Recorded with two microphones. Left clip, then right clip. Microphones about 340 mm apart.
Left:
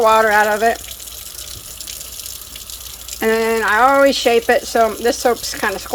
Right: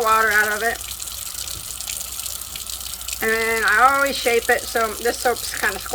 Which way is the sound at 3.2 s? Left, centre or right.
Left.